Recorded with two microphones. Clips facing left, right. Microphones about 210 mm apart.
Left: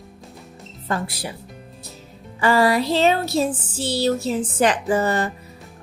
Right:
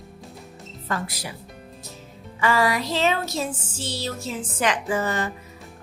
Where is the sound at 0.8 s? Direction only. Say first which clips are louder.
Left 4 dB; 30° left (ahead or behind).